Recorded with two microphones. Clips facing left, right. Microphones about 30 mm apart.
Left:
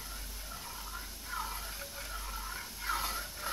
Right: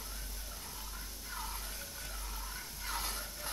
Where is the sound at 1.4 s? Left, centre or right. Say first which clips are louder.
Left 4 dB; centre.